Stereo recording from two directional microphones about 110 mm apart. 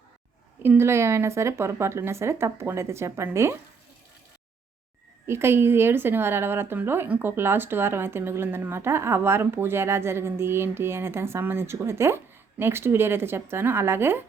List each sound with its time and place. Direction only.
0.6 s a woman's voice: 20° right (ahead or behind)
5.2 s a woman's voice: 25° right (ahead or behind)